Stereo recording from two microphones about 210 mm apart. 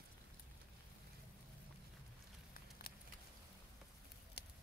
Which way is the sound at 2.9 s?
45° left (ahead or behind).